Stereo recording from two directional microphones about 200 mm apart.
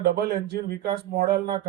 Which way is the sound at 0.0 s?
50° right (ahead or behind).